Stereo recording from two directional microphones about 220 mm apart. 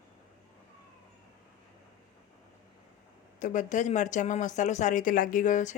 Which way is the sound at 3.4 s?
35° left (ahead or behind).